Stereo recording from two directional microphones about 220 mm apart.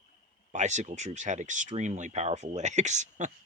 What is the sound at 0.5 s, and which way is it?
Speech, 30° right (ahead or behind).